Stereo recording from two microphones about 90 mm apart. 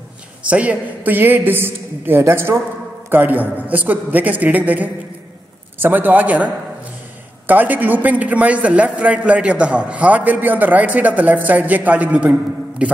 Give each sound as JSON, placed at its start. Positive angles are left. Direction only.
{"t": 0.4, "sound": "a man's voice", "side_deg": -15}